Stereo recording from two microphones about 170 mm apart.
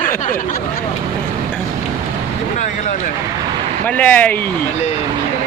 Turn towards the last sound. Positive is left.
turn(degrees=10)  # may be behind; listen again after turning